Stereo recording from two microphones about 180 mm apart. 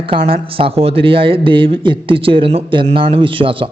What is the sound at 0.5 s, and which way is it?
A man's voice, 30° right (ahead or behind).